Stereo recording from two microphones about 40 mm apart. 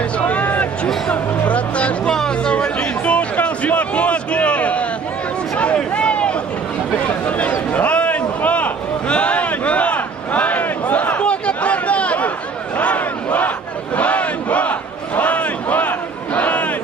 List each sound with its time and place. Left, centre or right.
0.2 s a sound: left
1.5 s music: left
2.1 s chatter: left
2.5 s chatter: left
3.4 s a sound: left
5.9 s a sound: left
9.1 s crowd: left
11.4 s chatter: left
12.7 s crowd: left
13.9 s battle cry: left
16.3 s crowd: left